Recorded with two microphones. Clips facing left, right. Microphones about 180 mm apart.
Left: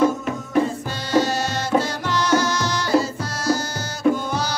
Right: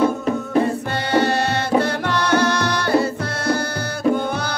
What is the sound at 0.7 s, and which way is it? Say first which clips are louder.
Music: right 5 dB; 60° right (ahead or behind).